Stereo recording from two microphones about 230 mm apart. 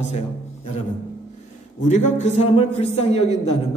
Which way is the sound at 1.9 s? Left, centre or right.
Left.